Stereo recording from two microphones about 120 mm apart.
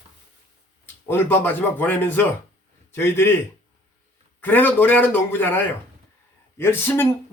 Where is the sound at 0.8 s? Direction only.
20° left (ahead or behind).